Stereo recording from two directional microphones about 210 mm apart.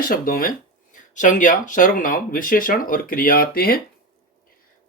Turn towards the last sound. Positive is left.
turn(degrees=45)  # may be behind; listen again after turning